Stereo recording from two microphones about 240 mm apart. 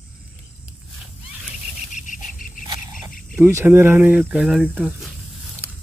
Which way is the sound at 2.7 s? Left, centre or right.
Centre.